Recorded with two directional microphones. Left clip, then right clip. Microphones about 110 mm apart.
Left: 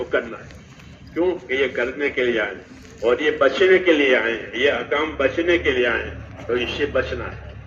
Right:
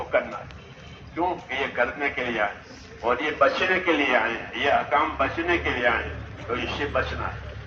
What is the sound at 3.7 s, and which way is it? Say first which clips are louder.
A man's voice: left 6 dB; 55° right (ahead or behind).